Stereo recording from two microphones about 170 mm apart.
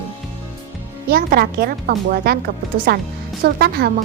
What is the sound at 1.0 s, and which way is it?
A woman's voice, 60° right (ahead or behind).